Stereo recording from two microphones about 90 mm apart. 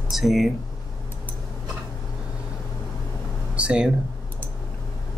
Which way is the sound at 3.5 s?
10° right (ahead or behind).